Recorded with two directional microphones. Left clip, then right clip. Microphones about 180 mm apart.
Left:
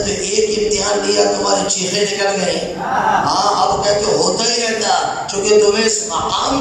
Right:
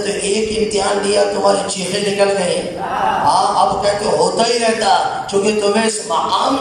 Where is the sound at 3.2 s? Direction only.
45° right (ahead or behind).